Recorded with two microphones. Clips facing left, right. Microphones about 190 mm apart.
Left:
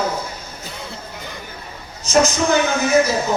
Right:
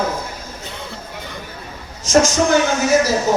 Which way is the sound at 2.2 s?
90° right.